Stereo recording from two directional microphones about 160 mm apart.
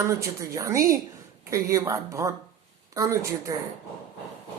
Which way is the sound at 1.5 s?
20° right (ahead or behind).